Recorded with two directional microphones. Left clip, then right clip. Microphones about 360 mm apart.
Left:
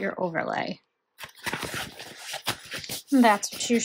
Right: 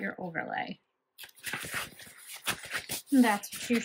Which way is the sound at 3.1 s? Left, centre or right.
Centre.